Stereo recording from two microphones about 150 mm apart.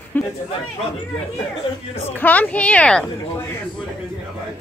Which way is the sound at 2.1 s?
10° left (ahead or behind).